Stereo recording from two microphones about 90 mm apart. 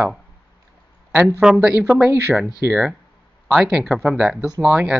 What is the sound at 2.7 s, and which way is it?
Speech, 15° right (ahead or behind).